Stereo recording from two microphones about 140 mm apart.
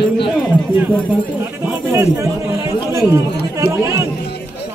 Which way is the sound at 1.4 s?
15° right (ahead or behind).